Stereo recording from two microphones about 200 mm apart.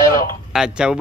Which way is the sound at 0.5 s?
5° right (ahead or behind).